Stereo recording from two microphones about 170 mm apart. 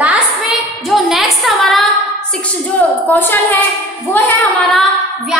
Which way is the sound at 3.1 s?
10° left (ahead or behind).